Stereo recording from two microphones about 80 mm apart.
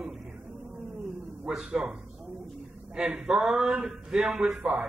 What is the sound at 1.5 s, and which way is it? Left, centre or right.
Speech, centre.